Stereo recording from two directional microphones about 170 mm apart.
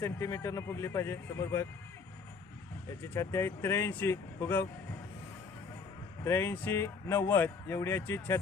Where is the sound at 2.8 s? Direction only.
15° left (ahead or behind).